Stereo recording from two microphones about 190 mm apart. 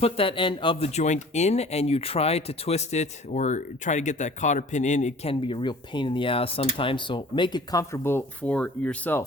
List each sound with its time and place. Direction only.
0.0 s speech: 30° left (ahead or behind); by 9.2 s 10° left (ahead or behind)